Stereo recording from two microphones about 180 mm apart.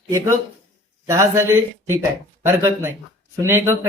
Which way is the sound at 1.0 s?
15° right (ahead or behind).